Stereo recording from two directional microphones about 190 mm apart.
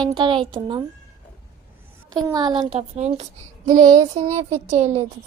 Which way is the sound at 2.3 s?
20° right (ahead or behind).